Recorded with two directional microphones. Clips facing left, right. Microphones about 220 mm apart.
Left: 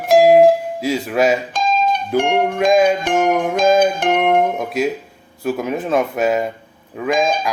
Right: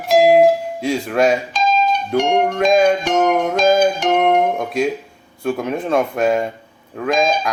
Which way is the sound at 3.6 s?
55° left (ahead or behind).